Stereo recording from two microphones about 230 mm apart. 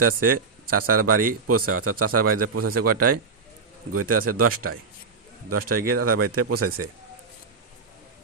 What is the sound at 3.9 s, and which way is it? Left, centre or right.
A man's voice, right.